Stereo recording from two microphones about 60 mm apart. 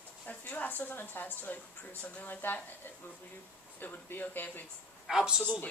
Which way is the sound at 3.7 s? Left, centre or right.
Left.